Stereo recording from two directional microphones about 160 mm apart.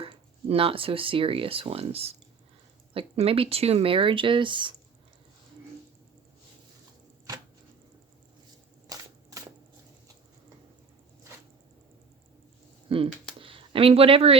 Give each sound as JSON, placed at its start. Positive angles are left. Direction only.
{"t": 0.0, "sound": "speech", "side_deg": -35}
{"t": 8.9, "sound": "a sound", "side_deg": -20}
{"t": 12.9, "sound": "speech", "side_deg": -35}